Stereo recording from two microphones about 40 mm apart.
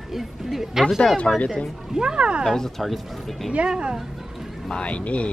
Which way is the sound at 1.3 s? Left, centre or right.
Left.